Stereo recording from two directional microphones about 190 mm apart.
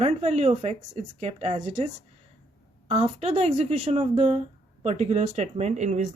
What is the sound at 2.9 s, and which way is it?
Speech, 35° right (ahead or behind).